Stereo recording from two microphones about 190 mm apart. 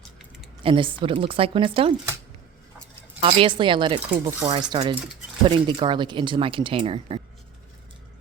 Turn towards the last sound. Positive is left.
turn(degrees=-30)  # may be behind; listen again after turning